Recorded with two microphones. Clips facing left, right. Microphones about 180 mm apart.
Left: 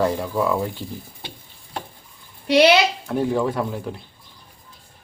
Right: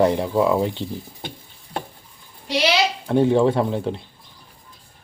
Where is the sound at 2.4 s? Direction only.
60° left (ahead or behind).